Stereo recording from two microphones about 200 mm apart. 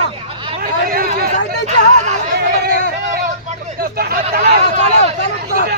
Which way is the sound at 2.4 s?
50° right (ahead or behind).